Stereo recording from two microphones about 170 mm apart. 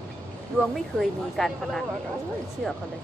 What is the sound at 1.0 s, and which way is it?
Speech, centre (ahead or behind).